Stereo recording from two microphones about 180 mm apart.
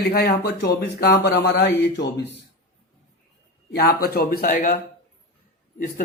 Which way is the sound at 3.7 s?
60° left (ahead or behind).